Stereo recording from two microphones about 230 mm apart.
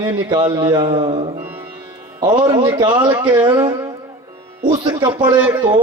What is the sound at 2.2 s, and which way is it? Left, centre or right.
A man's voice, centre.